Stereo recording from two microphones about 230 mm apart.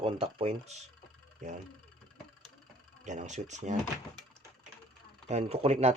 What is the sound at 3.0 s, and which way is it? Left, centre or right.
Speech, right.